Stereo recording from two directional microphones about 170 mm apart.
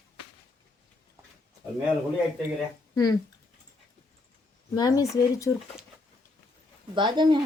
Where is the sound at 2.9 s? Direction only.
25° left (ahead or behind).